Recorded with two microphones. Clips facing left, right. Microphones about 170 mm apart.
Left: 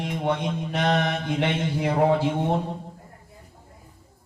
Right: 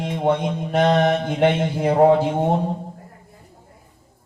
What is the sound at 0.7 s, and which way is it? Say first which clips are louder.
Mantra: right 8 dB; 45° right (ahead or behind).